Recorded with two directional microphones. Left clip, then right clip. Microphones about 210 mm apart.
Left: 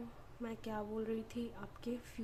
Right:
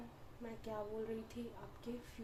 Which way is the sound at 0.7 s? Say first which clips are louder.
Left 1 dB; 35° left (ahead or behind).